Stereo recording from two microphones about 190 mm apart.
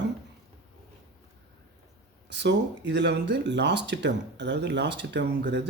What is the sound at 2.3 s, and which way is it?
Speech, 65° right (ahead or behind).